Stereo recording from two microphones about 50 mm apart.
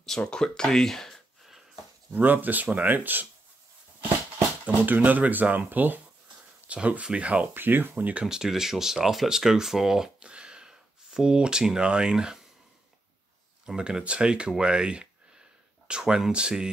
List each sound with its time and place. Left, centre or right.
0.0 s speech: centre
2.0 s speech: right
4.6 s speech: right
6.7 s speech: right
7.5 s speech: right
7.9 s speech: right
8.3 s speech: centre
13.7 s speech: centre
14.6 s a sound: centre
15.9 s speech: centre